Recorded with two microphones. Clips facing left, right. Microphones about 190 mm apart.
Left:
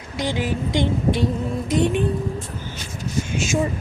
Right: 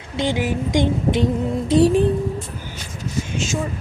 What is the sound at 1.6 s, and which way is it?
Music, 30° right (ahead or behind).